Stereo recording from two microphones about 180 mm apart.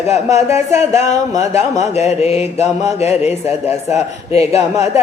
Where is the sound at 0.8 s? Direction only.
40° left (ahead or behind).